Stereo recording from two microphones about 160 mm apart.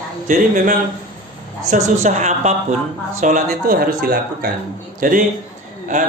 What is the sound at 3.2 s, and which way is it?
A man's voice, 60° right (ahead or behind).